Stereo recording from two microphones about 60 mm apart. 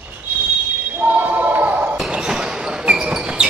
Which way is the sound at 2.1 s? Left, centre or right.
Centre.